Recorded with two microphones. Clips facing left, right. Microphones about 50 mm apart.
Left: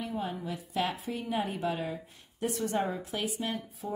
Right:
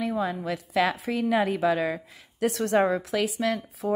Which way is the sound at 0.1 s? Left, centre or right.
Right.